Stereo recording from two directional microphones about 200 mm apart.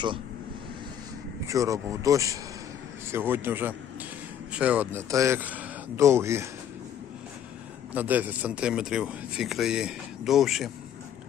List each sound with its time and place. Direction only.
1.5 s speech: 15° right (ahead or behind)
7.9 s speech: 10° right (ahead or behind)